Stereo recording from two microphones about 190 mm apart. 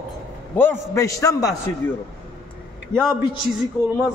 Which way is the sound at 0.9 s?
15° left (ahead or behind).